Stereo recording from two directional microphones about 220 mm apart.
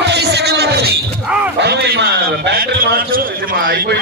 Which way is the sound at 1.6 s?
50° right (ahead or behind).